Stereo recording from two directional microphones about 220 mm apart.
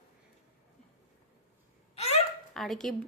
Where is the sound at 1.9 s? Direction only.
30° left (ahead or behind).